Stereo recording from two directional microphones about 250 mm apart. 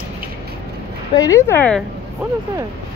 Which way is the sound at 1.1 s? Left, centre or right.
Centre.